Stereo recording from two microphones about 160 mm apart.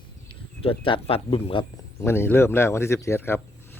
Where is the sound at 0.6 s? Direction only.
35° left (ahead or behind).